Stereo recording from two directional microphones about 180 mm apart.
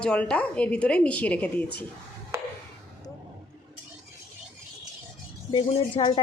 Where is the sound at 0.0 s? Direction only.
5° left (ahead or behind).